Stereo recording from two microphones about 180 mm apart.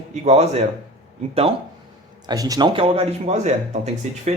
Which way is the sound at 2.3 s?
20° right (ahead or behind).